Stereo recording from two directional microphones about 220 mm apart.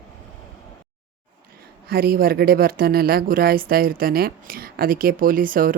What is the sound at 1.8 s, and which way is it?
Speech, 45° right (ahead or behind).